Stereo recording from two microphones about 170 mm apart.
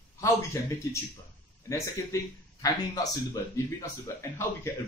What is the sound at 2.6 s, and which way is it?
Speech, 20° left (ahead or behind).